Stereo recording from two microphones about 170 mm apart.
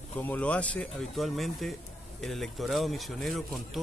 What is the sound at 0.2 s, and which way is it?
Speech, 10° left (ahead or behind).